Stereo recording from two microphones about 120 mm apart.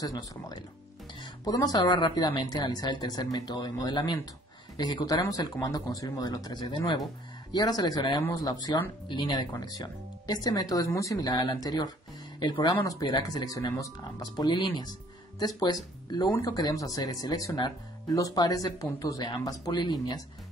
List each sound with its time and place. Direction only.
0.0 s speech: 35° left (ahead or behind)